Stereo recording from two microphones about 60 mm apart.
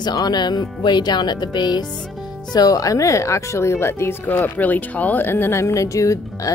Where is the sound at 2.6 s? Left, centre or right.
Left.